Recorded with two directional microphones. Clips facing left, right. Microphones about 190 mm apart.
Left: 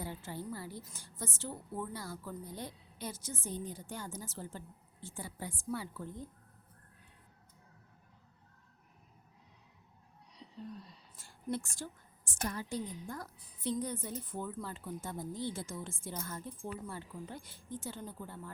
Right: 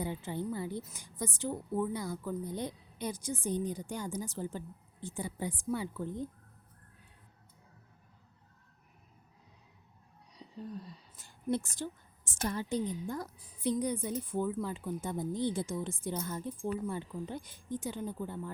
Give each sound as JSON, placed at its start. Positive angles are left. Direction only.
{"t": 0.0, "sound": "a woman's voice", "side_deg": -20}
{"t": 11.5, "sound": "a woman's voice", "side_deg": -20}